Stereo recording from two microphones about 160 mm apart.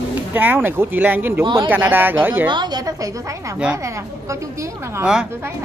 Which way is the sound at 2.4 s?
25° right (ahead or behind).